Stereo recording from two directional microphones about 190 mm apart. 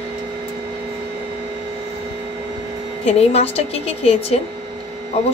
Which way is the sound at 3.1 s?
35° left (ahead or behind).